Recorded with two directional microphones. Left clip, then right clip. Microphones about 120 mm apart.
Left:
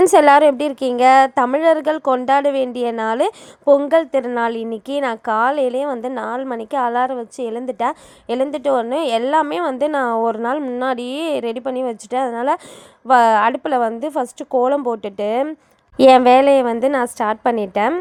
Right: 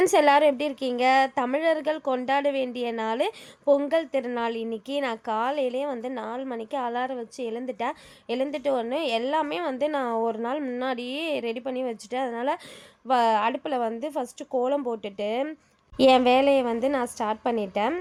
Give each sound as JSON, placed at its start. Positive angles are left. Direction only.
{"t": 0.1, "sound": "a woman's voice", "side_deg": 45}